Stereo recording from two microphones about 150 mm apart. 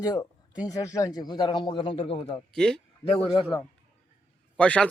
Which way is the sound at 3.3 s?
35° left (ahead or behind).